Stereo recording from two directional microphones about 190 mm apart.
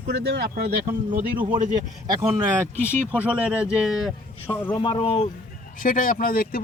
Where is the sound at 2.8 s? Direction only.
10° left (ahead or behind).